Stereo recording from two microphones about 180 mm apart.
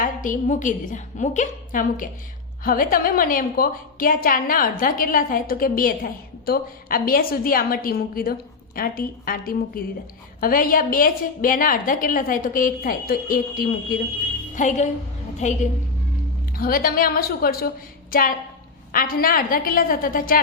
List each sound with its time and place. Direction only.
0.0 s a woman's voice: 45° left (ahead or behind)
16.6 s a woman's voice: 55° left (ahead or behind)